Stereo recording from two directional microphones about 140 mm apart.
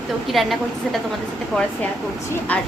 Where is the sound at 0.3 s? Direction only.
Centre (ahead or behind).